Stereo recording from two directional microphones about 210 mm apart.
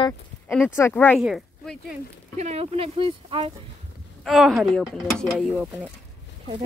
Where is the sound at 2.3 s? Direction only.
30° right (ahead or behind).